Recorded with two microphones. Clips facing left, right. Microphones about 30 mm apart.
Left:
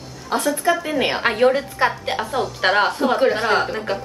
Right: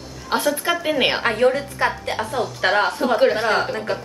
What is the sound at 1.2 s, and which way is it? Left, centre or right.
Speech, centre.